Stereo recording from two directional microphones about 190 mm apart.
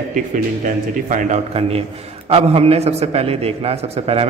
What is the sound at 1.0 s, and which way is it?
A man's voice, 40° right (ahead or behind).